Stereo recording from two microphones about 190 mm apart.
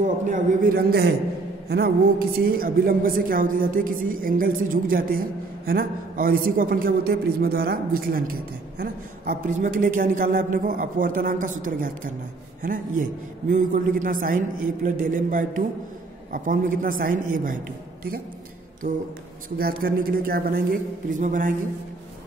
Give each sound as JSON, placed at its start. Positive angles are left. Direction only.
{"t": 0.0, "sound": "a woman's voice", "side_deg": -40}
{"t": 18.8, "sound": "a woman's voice", "side_deg": -45}